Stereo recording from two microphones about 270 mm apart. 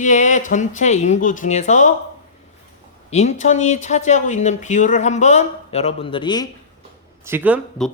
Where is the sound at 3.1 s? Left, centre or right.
Left.